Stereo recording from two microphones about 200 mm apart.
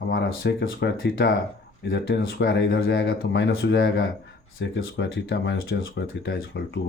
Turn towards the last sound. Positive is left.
turn(degrees=60)  # may be behind; listen again after turning